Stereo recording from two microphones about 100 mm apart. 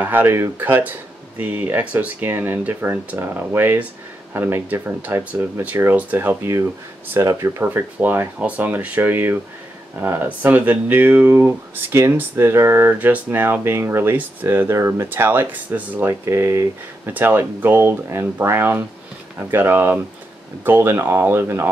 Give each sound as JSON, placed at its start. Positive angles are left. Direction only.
{"t": 0.0, "sound": "speech", "side_deg": -20}